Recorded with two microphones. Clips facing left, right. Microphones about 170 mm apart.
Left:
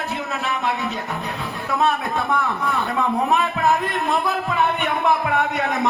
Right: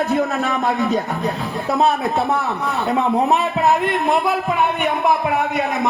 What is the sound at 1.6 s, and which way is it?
A man's voice, 35° right (ahead or behind).